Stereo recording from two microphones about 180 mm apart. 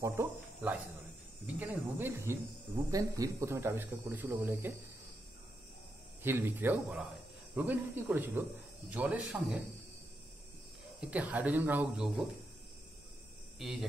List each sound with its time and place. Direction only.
0.0 s speech: 15° right (ahead or behind)
1.4 s speech: 10° right (ahead or behind)
6.2 s speech: 10° right (ahead or behind)
11.0 s speech: 5° right (ahead or behind)
13.6 s cricket: centre (ahead or behind)